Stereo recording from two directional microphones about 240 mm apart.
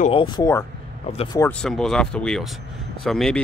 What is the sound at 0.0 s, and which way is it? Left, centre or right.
Speech, left.